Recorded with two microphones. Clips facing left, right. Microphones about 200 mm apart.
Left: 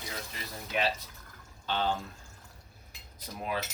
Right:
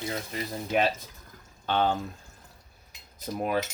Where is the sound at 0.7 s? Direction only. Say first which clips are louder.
Right 5 dB; 50° right (ahead or behind).